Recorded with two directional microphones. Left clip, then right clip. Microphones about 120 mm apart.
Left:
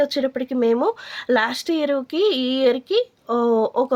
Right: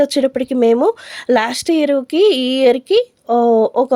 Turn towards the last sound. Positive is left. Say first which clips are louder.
# right 6 dB
turn(degrees=-55)  # may be behind; listen again after turning